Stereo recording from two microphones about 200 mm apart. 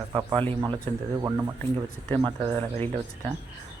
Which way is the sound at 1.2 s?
15° right (ahead or behind).